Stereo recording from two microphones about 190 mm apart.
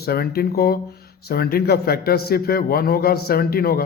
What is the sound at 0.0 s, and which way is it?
Speech, 55° left (ahead or behind).